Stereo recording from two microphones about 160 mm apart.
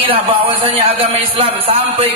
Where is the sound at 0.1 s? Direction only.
35° right (ahead or behind).